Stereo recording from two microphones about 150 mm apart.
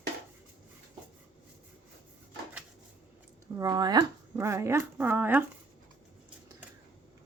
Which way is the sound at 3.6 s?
25° right (ahead or behind).